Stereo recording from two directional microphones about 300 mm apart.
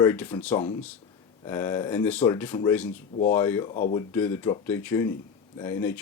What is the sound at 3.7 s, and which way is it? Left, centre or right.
Speech, left.